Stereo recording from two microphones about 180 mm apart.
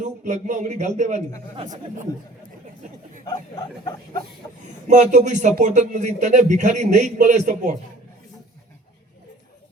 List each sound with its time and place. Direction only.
0.0 s a man's voice: 45° right (ahead or behind)
3.2 s speech: 20° left (ahead or behind)
4.9 s a man's voice: 40° right (ahead or behind)